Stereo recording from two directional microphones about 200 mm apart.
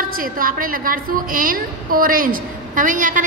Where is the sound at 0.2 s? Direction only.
45° right (ahead or behind).